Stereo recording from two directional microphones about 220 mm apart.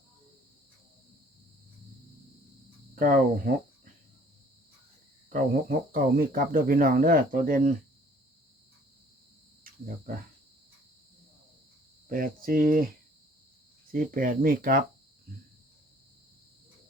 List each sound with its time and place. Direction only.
2.9 s speech: 40° right (ahead or behind)
5.3 s speech: 40° right (ahead or behind)
9.7 s cricket: 40° right (ahead or behind)
12.0 s speech: 40° right (ahead or behind)
13.9 s speech: 40° right (ahead or behind)